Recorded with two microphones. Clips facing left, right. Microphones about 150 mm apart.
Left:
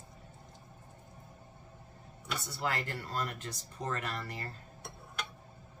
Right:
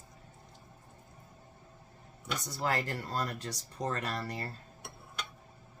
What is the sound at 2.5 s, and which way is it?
Speech, 40° right (ahead or behind).